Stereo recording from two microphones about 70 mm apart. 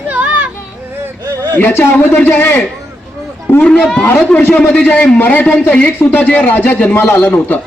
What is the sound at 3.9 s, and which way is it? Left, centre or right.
Speech, left.